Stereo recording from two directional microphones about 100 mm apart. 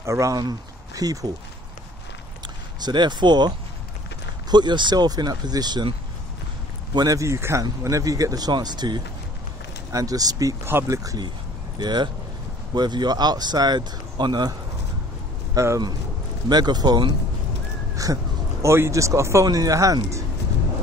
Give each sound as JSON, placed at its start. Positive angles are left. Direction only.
{"t": 0.0, "sound": "speech", "side_deg": -30}
{"t": 2.8, "sound": "speech", "side_deg": -50}
{"t": 10.6, "sound": "speech", "side_deg": -25}
{"t": 11.0, "sound": "speech", "side_deg": -35}
{"t": 11.8, "sound": "speech", "side_deg": -45}
{"t": 15.5, "sound": "speech", "side_deg": -30}
{"t": 16.4, "sound": "speech", "side_deg": -45}